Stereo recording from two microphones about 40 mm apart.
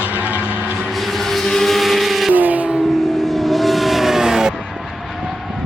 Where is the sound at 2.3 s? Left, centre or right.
Right.